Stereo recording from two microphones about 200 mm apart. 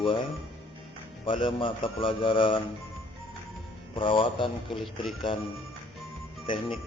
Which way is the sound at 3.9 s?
25° left (ahead or behind).